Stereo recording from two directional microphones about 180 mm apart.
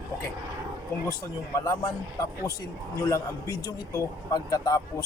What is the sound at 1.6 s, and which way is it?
A man's voice, 20° left (ahead or behind).